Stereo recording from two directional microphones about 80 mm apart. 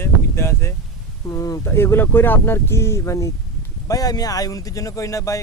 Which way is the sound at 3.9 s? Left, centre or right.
Left.